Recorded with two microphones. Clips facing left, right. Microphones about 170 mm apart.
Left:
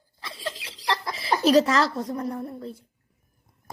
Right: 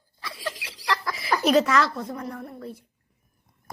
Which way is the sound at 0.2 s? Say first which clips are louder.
Right 1 dB; 25° left (ahead or behind).